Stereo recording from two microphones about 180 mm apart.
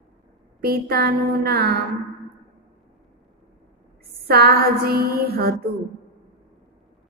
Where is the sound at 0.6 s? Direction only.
60° right (ahead or behind).